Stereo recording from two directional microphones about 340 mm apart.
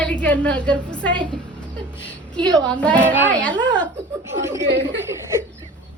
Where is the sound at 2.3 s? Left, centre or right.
Centre.